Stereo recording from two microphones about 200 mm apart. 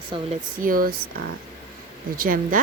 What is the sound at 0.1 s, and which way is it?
Speech, 25° right (ahead or behind).